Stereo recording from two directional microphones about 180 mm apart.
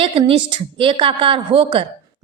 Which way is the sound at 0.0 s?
30° right (ahead or behind).